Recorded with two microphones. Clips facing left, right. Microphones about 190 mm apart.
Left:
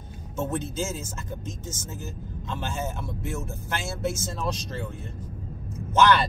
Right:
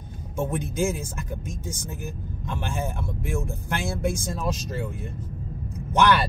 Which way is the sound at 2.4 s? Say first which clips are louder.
Right 1 dB; 15° right (ahead or behind).